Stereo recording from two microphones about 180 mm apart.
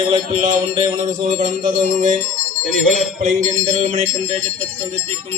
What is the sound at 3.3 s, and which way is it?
Music, 40° right (ahead or behind).